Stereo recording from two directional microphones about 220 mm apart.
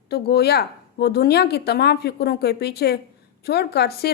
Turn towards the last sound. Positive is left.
turn(degrees=45)  # may be behind; listen again after turning